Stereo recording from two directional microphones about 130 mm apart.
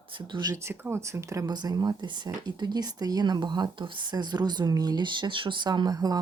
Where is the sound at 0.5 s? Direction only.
20° right (ahead or behind).